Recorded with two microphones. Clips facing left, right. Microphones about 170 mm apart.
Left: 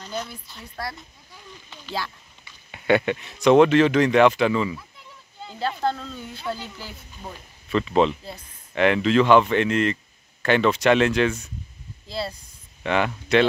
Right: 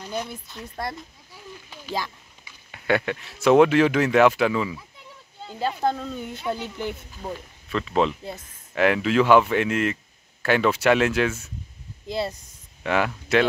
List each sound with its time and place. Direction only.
0.0 s a sound: 10° right (ahead or behind)
1.7 s a sound: 10° right (ahead or behind)
2.7 s speech: centre (ahead or behind); by 6.9 s 20° right (ahead or behind)
7.7 s speech: centre (ahead or behind)
12.1 s speech: 20° right (ahead or behind)
12.8 s speech: 5° right (ahead or behind)